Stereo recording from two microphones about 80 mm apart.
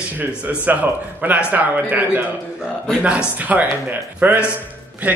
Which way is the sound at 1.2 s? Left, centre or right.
Right.